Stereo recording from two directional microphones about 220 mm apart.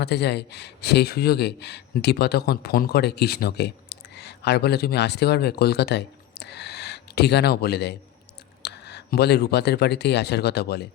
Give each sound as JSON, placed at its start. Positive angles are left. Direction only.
{"t": 0.0, "sound": "a man's voice", "side_deg": 50}